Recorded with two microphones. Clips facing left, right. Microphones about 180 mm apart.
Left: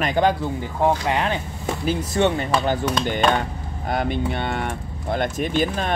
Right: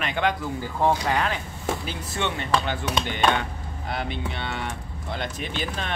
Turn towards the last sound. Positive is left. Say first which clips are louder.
# left 8 dB
turn(degrees=45)  # may be behind; listen again after turning